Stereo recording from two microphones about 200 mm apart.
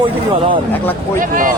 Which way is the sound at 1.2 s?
45° right (ahead or behind).